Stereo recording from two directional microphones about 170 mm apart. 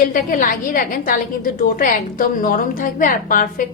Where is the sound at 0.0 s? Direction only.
50° left (ahead or behind).